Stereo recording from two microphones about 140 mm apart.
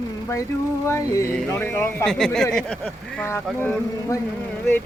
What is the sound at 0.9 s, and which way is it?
Speech, 20° left (ahead or behind).